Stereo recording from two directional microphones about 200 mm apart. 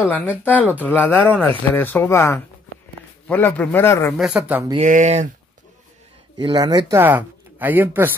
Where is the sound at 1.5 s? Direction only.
10° left (ahead or behind).